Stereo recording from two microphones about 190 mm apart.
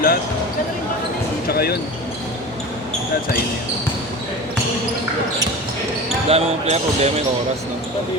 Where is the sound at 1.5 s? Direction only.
55° left (ahead or behind).